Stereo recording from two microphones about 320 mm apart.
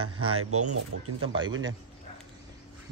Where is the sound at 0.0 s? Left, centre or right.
Right.